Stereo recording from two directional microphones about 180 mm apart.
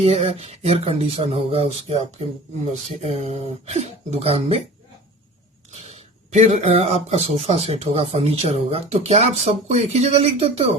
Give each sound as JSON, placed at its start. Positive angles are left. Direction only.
{"t": 0.0, "sound": "a man's voice", "side_deg": -30}
{"t": 5.9, "sound": "a man's voice", "side_deg": -35}